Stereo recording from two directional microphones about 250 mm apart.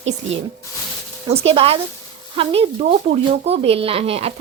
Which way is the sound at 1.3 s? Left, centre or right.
Right.